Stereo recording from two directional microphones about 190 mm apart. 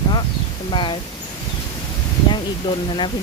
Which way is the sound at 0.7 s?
25° left (ahead or behind).